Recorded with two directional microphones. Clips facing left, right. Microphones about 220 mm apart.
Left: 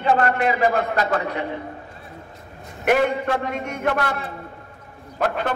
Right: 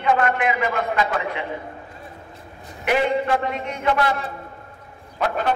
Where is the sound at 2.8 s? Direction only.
50° left (ahead or behind).